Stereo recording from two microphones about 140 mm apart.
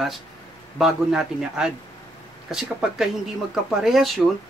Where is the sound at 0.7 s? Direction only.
5° right (ahead or behind).